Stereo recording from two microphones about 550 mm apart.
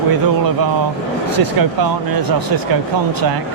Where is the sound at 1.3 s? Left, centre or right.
Right.